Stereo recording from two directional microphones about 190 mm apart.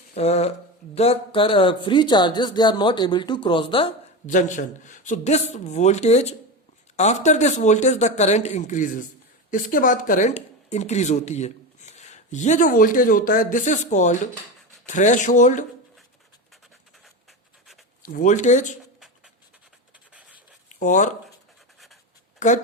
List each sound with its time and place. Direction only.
0.2 s speech: 35° left (ahead or behind)
4.3 s speech: 40° left (ahead or behind)
18.0 s speech: 45° left (ahead or behind)
20.7 s a sound: 40° left (ahead or behind)
22.4 s speech: 40° left (ahead or behind)